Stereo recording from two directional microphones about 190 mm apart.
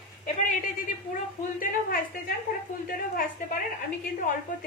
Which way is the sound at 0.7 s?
45° left (ahead or behind).